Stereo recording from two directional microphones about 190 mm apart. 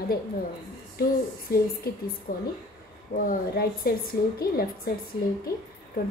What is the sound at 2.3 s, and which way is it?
A woman's voice, 50° left (ahead or behind).